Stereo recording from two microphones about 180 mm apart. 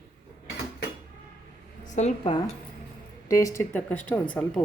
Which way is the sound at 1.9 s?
35° left (ahead or behind).